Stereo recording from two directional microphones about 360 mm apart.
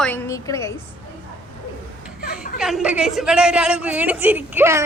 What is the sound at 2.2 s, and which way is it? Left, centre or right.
Chuckle, left.